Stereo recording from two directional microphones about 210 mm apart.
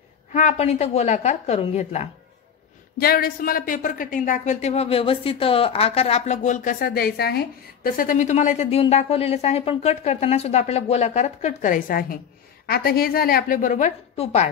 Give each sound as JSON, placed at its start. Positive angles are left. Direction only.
{"t": 0.3, "sound": "speech", "side_deg": 35}
{"t": 3.0, "sound": "speech", "side_deg": 45}